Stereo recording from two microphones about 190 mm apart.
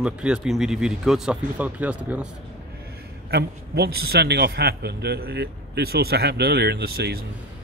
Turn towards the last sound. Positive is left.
turn(degrees=-55)  # may be behind; listen again after turning